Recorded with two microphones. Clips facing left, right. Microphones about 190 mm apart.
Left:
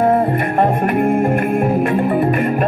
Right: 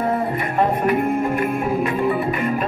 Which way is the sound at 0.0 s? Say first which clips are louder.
Left 7 dB; 50° left (ahead or behind).